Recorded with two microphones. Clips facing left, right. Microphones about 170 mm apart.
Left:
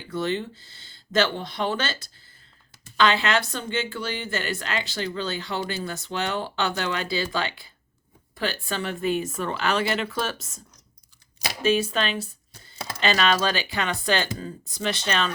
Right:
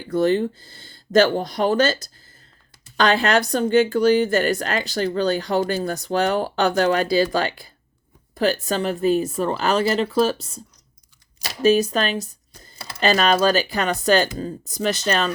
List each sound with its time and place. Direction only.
0.1 s speech: 50° right (ahead or behind)
11.6 s speech: 40° right (ahead or behind)